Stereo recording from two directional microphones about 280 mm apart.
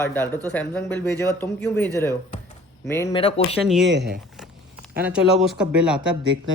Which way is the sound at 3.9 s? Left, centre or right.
Right.